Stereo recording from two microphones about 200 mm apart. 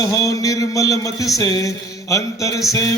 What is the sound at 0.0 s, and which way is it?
Speech, 15° left (ahead or behind).